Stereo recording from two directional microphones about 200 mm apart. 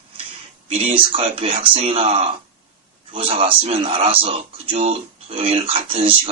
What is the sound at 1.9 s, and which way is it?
Speech, 25° right (ahead or behind).